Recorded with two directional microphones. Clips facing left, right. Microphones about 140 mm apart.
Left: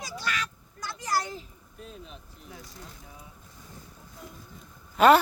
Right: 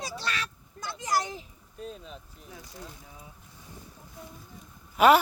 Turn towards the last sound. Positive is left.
turn(degrees=-10)  # may be behind; listen again after turning